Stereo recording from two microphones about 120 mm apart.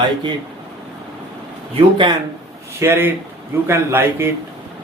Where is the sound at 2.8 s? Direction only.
20° right (ahead or behind).